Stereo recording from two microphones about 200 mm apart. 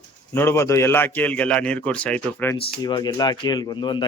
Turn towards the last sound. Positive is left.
turn(degrees=20)  # may be behind; listen again after turning